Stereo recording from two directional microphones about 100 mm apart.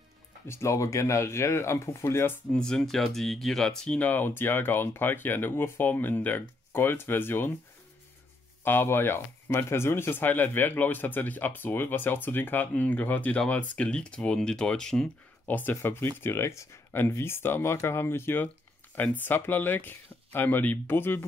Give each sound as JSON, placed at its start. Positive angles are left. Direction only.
{"t": 0.5, "sound": "speech", "side_deg": 30}
{"t": 2.5, "sound": "speech", "side_deg": 5}
{"t": 8.6, "sound": "speech", "side_deg": 20}
{"t": 15.4, "sound": "speech", "side_deg": 15}